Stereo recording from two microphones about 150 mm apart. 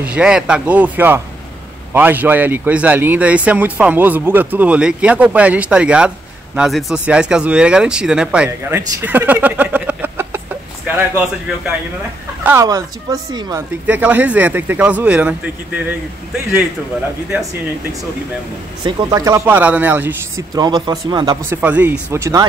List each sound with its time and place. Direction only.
0.0 s a man's voice: 5° right (ahead or behind); by 13.6 s 25° right (ahead or behind)
13.6 s a man's voice: 10° right (ahead or behind)
18.9 s a man's voice: 30° right (ahead or behind); by 20.4 s 10° right (ahead or behind)
20.5 s speech: 30° right (ahead or behind)
21.5 s a man's voice: 10° right (ahead or behind)